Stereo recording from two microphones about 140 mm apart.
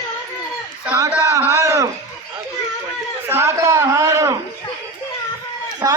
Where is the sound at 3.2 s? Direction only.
20° right (ahead or behind).